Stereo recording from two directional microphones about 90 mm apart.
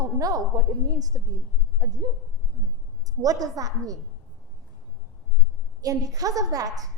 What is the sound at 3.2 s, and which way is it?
Speech, 45° right (ahead or behind).